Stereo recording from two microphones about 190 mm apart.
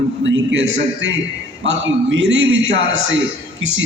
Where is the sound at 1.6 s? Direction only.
75° right (ahead or behind).